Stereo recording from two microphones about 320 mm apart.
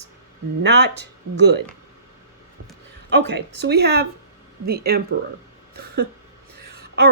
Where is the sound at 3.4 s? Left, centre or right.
Right.